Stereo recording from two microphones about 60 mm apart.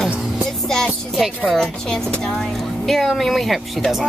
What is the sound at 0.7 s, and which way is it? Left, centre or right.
Music, centre.